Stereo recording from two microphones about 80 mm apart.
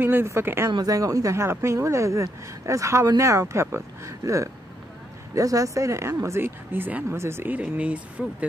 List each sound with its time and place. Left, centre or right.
0.0 s speech: right
0.7 s speech: right
0.9 s speech: right
7.1 s speech: right
7.5 s speech: centre